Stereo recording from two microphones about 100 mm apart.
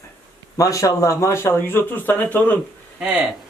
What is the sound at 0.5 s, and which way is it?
Speech, 35° left (ahead or behind).